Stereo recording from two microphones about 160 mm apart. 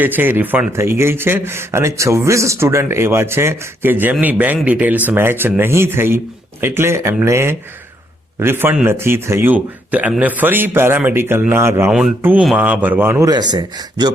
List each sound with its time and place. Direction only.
0.0 s a man's voice: 10° right (ahead or behind)